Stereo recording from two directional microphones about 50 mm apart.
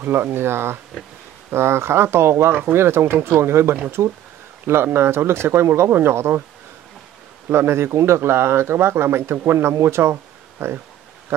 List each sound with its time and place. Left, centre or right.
0.0 s speech: right
4.9 s speech: right
7.4 s speech: right